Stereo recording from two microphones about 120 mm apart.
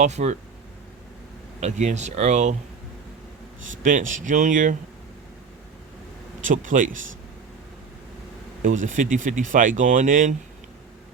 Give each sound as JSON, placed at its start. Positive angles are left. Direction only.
{"t": 0.0, "sound": "speech", "side_deg": -75}
{"t": 1.6, "sound": "speech", "side_deg": -75}
{"t": 3.8, "sound": "speech", "side_deg": -90}
{"t": 6.4, "sound": "speech", "side_deg": -90}
{"t": 8.7, "sound": "speech", "side_deg": -90}